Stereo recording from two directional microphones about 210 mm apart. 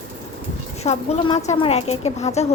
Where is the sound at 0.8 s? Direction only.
25° left (ahead or behind).